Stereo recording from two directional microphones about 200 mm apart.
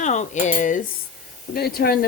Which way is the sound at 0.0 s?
35° left (ahead or behind).